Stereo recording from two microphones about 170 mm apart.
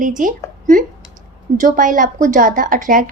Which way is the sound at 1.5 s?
50° right (ahead or behind).